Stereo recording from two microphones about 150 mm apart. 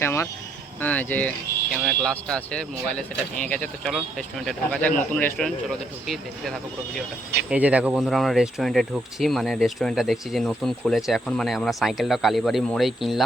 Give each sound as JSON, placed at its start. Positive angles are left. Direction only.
{"t": 0.0, "sound": "speech", "side_deg": 20}
{"t": 1.8, "sound": "speech", "side_deg": 0}